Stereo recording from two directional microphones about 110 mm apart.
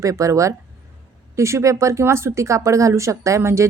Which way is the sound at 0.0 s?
30° right (ahead or behind).